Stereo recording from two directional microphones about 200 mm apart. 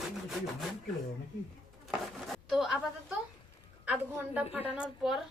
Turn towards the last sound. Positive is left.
turn(degrees=-5)  # may be behind; listen again after turning